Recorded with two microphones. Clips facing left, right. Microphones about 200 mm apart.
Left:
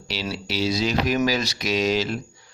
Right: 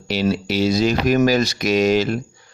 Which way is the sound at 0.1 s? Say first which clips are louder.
Right 9 dB; 50° right (ahead or behind).